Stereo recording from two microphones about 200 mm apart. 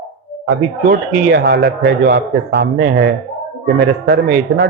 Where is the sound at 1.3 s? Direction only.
55° right (ahead or behind).